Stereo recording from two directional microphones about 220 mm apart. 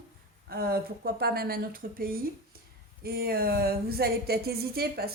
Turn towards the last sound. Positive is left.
turn(degrees=-45)  # may be behind; listen again after turning